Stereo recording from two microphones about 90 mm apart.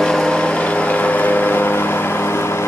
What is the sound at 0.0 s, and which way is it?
Vehicle, 5° left (ahead or behind).